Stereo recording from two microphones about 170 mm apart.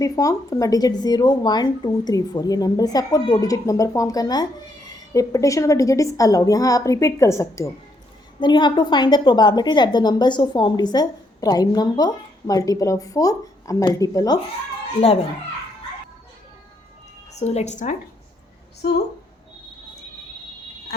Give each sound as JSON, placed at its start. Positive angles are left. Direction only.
{"t": 0.0, "sound": "a woman's voice", "side_deg": 20}
{"t": 17.3, "sound": "speech", "side_deg": 40}
{"t": 18.8, "sound": "a woman's voice", "side_deg": 75}